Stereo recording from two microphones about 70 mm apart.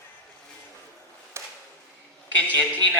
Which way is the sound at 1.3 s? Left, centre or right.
Right.